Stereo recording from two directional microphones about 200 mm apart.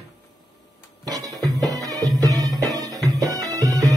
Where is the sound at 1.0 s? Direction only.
20° right (ahead or behind).